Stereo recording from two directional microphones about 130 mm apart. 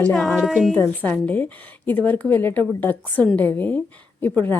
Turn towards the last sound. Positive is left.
turn(degrees=15)  # may be behind; listen again after turning